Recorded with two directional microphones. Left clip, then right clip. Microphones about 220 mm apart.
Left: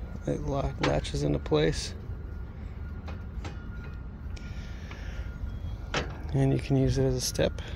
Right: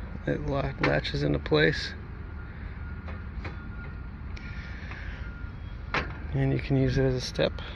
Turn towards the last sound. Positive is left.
turn(degrees=30)  # may be behind; listen again after turning